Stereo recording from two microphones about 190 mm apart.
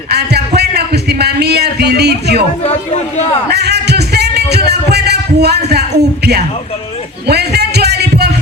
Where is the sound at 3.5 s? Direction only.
60° right (ahead or behind).